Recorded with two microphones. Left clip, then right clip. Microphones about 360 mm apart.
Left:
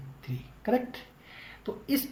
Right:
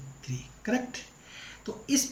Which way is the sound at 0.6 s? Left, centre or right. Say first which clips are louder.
Left 3 dB; centre.